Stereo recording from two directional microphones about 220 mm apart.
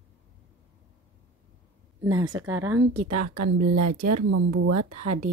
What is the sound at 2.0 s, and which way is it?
Speech, 20° right (ahead or behind).